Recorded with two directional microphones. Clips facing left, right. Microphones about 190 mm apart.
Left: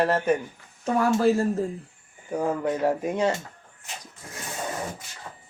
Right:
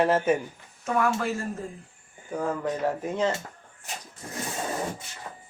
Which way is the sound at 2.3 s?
15° left (ahead or behind).